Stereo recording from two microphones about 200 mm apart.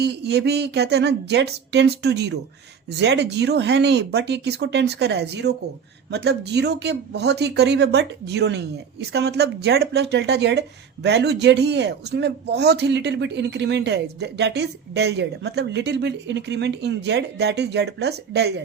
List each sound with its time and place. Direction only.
0.0 s speech: 55° right (ahead or behind)